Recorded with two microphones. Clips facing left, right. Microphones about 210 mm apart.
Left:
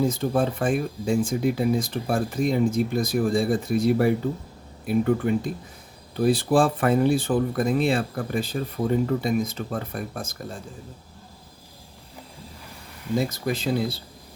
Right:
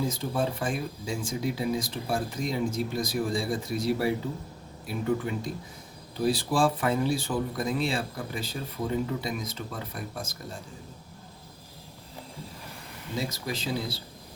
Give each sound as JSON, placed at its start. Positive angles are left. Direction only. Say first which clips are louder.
{"t": 0.2, "sound": "speech", "louder": "left 6 dB", "side_deg": 55}
{"t": 13.1, "sound": "speech", "louder": "left 7 dB", "side_deg": 50}